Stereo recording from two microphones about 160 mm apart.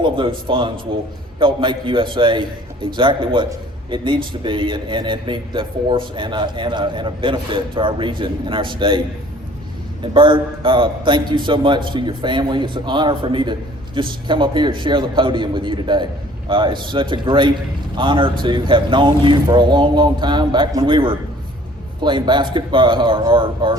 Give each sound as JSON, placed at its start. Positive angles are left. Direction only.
{"t": 0.0, "sound": "a man's voice", "side_deg": -30}